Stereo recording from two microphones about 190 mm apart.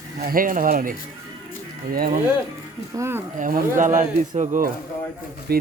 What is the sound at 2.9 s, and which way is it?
Speech, 15° right (ahead or behind).